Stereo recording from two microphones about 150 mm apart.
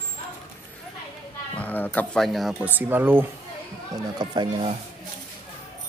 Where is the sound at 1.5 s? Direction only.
10° left (ahead or behind).